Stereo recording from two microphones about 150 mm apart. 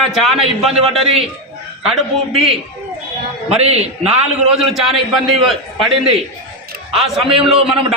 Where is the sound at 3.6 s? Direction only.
45° right (ahead or behind).